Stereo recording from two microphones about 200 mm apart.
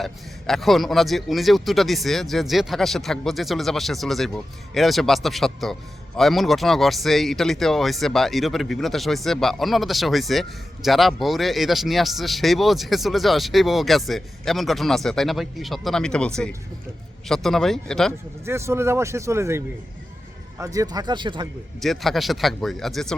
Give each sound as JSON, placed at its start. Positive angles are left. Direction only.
{"t": 0.0, "sound": "speech", "side_deg": 0}
{"t": 18.4, "sound": "a man's voice", "side_deg": -15}
{"t": 21.8, "sound": "speech", "side_deg": 0}